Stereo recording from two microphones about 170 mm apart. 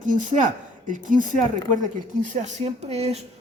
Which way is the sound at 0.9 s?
50° right (ahead or behind).